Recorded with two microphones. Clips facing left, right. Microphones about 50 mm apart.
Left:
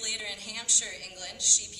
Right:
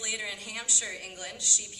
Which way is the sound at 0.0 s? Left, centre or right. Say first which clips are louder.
Right 2 dB; right.